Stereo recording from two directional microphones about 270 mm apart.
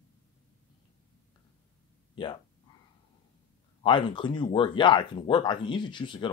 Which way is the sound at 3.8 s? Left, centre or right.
Centre.